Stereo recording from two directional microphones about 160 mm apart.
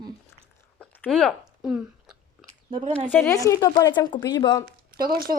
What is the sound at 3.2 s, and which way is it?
A woman's voice, 20° left (ahead or behind).